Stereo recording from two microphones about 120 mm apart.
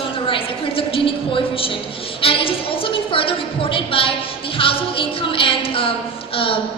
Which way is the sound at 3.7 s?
50° left (ahead or behind).